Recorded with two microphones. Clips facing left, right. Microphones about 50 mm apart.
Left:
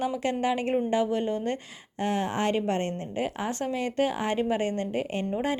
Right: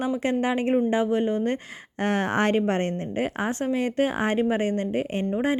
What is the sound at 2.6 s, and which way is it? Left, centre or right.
A woman's voice, right.